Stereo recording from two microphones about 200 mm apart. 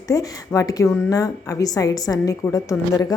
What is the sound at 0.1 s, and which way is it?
A woman's voice, 15° left (ahead or behind).